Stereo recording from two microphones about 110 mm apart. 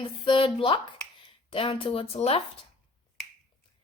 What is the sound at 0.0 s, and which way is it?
Speech, 55° left (ahead or behind).